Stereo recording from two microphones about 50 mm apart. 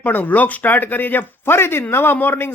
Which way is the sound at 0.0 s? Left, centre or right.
Left.